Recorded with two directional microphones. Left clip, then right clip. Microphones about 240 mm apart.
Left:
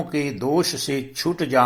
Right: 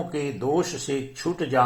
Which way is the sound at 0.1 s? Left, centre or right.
Left.